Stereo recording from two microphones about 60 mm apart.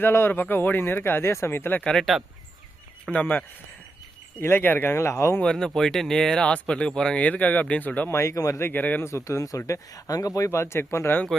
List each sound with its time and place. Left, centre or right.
0.0 s speech: left
1.8 s speech: centre
3.1 s speech: left
4.4 s speech: left
5.4 s speech: centre
7.2 s speech: left
8.1 s speech: left
8.5 s speech: left
9.0 s speech: left